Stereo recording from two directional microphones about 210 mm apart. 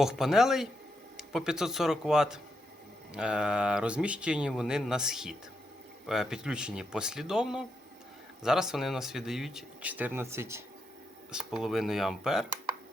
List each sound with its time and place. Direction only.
0.0 s speech: centre (ahead or behind)